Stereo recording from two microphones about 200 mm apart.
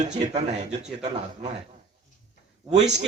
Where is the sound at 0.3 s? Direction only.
35° right (ahead or behind).